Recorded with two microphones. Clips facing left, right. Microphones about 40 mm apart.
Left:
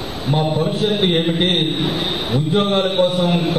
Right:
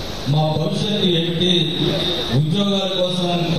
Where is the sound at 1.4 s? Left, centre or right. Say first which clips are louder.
Even; left.